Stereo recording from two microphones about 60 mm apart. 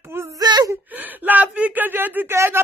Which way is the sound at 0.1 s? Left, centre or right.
Right.